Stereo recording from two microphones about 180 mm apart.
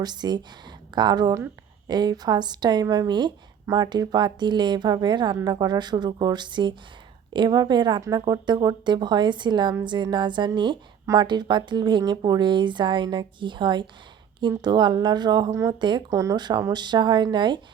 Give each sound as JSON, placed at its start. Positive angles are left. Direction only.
{"t": 0.0, "sound": "a woman's voice", "side_deg": -25}